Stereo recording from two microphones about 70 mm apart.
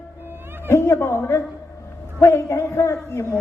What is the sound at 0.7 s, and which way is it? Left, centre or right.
Speech, left.